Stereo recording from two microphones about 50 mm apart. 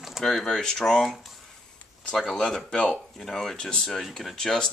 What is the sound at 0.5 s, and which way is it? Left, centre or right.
Speech, centre.